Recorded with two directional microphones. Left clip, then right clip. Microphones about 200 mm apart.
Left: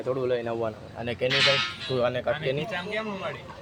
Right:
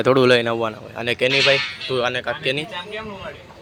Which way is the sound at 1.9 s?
Centre (ahead or behind).